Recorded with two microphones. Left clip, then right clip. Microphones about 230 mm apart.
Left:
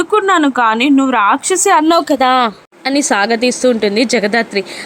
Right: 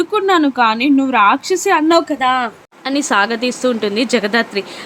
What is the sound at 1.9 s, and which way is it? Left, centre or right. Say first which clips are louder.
Speech: left 2 dB; left.